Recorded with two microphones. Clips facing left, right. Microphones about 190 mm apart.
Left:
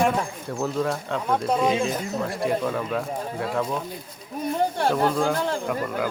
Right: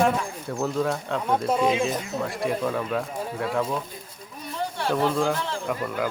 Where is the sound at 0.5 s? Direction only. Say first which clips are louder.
Even; centre (ahead or behind).